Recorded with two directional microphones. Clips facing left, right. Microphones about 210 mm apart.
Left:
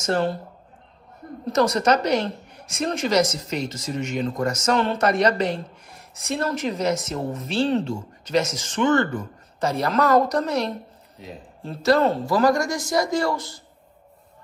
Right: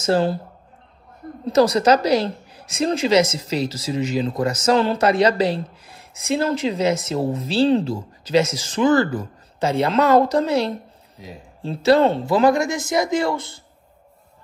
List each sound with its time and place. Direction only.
0.0 s speech: 30° right (ahead or behind)
1.4 s a man's voice: 30° right (ahead or behind)